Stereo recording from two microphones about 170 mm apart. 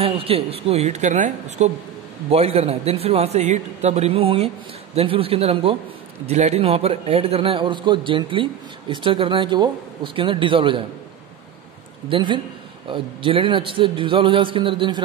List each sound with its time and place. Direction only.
0.0 s a man's voice: 35° right (ahead or behind)
12.1 s a man's voice: 30° right (ahead or behind)